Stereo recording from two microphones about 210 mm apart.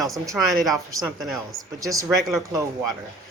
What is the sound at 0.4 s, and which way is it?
Speech, 5° right (ahead or behind).